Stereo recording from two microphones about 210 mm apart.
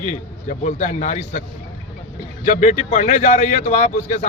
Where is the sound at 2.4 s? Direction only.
35° left (ahead or behind).